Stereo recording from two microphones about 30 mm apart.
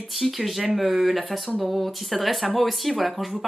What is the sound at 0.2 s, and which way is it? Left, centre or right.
Speech, centre.